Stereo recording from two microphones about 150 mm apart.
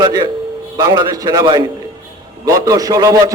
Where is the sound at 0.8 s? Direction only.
25° right (ahead or behind).